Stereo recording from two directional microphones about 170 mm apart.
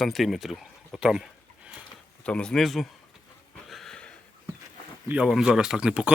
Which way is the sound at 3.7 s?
5° left (ahead or behind).